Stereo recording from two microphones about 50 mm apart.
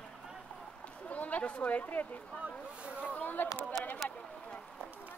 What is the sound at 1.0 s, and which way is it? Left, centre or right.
A woman's voice, left.